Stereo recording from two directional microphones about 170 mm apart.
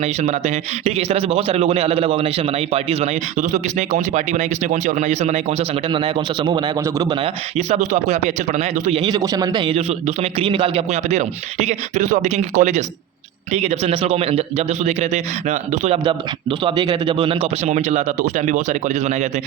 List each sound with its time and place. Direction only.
0.0 s a man's voice: 40° right (ahead or behind); by 7.2 s 20° right (ahead or behind)
7.2 s speech: 40° right (ahead or behind)
9.0 s speech: 25° right (ahead or behind); by 16.0 s 45° right (ahead or behind)
16.0 s speech: 30° right (ahead or behind)